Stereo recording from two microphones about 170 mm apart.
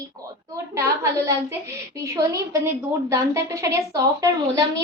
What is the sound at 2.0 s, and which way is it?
A woman's voice, 20° right (ahead or behind).